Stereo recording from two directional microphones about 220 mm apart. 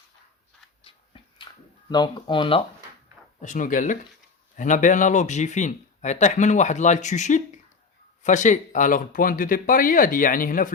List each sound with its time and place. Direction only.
0.9 s a sound: 25° left (ahead or behind)
1.9 s speech: 20° left (ahead or behind)
3.4 s speech: 35° left (ahead or behind)